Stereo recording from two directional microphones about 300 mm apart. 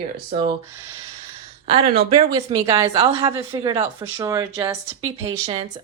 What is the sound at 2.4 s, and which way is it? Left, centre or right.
A woman's voice, centre.